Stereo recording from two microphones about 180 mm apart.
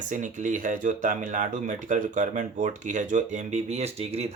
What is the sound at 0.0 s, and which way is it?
Speech, 45° right (ahead or behind).